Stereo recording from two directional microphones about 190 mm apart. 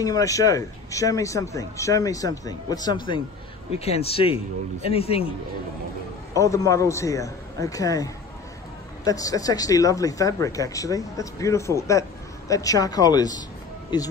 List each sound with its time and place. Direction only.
0.0 s speech: 20° left (ahead or behind)
3.7 s speech: 35° left (ahead or behind)
6.3 s speech: 15° left (ahead or behind)